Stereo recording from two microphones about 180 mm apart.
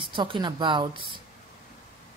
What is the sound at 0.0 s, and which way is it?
Speech, 25° right (ahead or behind).